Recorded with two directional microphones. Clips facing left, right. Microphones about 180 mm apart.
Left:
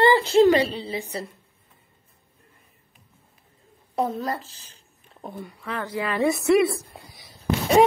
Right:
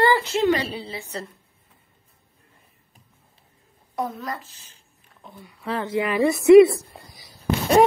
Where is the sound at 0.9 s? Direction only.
15° left (ahead or behind).